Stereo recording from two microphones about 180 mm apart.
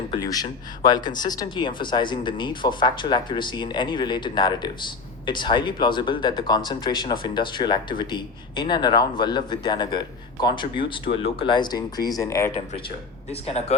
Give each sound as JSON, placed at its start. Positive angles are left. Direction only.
{"t": 0.2, "sound": "speech", "side_deg": 20}
{"t": 13.3, "sound": "speech", "side_deg": 35}